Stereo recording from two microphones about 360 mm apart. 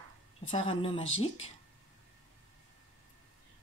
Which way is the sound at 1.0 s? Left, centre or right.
Left.